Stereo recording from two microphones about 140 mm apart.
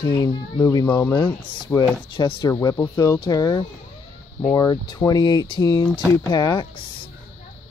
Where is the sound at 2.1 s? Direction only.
35° left (ahead or behind).